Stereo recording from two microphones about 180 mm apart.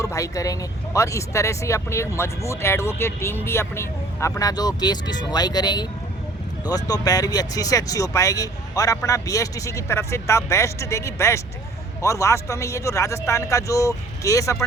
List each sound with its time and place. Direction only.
0.0 s speech: 15° left (ahead or behind)